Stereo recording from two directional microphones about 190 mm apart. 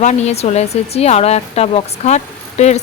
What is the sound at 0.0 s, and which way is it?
Speech, 35° left (ahead or behind).